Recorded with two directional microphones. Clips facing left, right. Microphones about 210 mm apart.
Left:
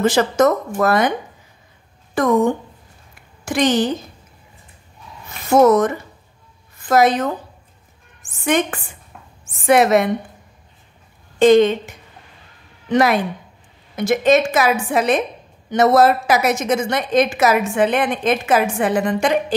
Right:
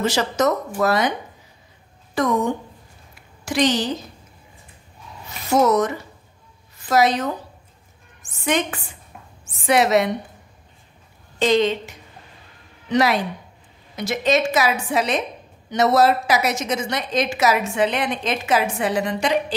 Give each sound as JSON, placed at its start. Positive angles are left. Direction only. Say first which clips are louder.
{"t": 0.0, "sound": "a woman's voice", "louder": "left 5 dB", "side_deg": 50}
{"t": 2.1, "sound": "a woman's voice", "louder": "left 5 dB", "side_deg": 50}
{"t": 5.5, "sound": "a woman's voice", "louder": "left 5 dB", "side_deg": 50}
{"t": 11.3, "sound": "a woman's voice", "louder": "left 7 dB", "side_deg": 50}
{"t": 12.9, "sound": "a woman's voice", "louder": "left 3 dB", "side_deg": 50}